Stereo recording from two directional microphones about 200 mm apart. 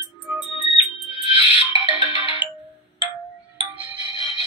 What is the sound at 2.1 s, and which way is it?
Ringtone, 25° left (ahead or behind).